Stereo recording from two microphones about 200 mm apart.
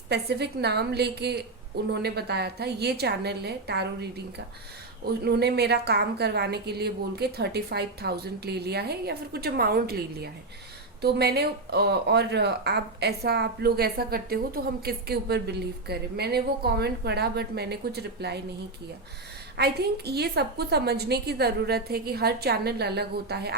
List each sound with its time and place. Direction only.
0.1 s a woman's voice: 55° right (ahead or behind)
19.5 s speech: 55° right (ahead or behind)